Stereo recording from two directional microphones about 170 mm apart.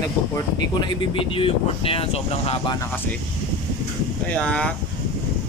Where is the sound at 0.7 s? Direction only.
30° left (ahead or behind).